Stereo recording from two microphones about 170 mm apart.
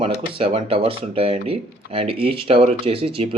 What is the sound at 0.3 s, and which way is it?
Speech, 35° right (ahead or behind).